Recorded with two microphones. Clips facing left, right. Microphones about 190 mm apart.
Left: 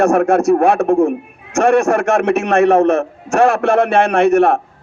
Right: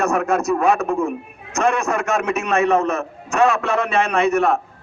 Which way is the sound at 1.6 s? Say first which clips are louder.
Left 7 dB; 80° left.